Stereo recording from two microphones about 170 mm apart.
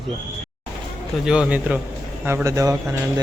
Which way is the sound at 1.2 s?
5° right (ahead or behind).